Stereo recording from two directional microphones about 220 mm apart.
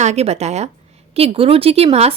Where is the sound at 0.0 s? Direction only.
30° right (ahead or behind).